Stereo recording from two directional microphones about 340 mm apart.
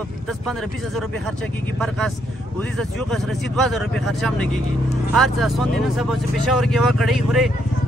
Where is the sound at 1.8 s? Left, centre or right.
Centre.